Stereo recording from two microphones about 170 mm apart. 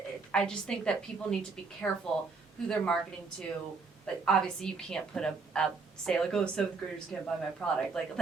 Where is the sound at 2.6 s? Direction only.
5° left (ahead or behind).